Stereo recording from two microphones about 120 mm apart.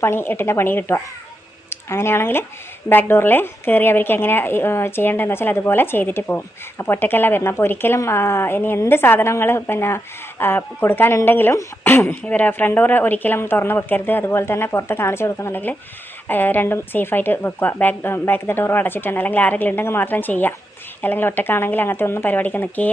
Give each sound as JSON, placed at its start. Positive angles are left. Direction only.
{"t": 0.0, "sound": "a woman's voice", "side_deg": 20}